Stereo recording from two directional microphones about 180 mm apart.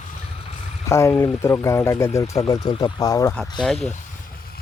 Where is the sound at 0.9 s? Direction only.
15° left (ahead or behind).